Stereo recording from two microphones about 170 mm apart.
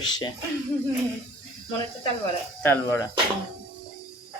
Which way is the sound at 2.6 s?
15° left (ahead or behind).